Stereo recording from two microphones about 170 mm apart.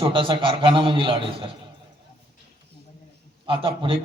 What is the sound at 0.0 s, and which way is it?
A man's voice, 30° right (ahead or behind).